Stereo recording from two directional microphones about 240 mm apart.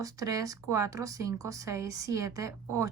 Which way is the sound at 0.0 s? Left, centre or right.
Centre.